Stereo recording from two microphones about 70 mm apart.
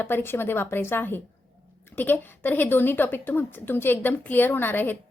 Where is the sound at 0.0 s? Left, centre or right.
Left.